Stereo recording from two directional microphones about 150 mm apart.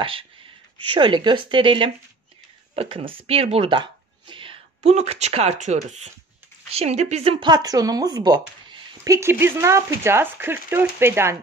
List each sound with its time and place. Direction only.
0.7 s a woman's voice: 35° right (ahead or behind)
7.3 s speech: 25° right (ahead or behind)